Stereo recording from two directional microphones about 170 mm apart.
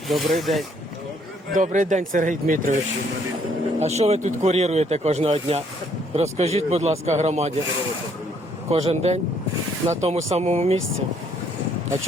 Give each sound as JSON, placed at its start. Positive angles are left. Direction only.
{"t": 0.1, "sound": "speech", "side_deg": 0}
{"t": 1.5, "sound": "speech", "side_deg": -50}
{"t": 3.8, "sound": "speech", "side_deg": -40}
{"t": 8.7, "sound": "speech", "side_deg": -35}